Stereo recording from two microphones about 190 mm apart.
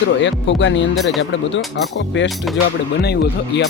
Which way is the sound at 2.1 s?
70° left (ahead or behind).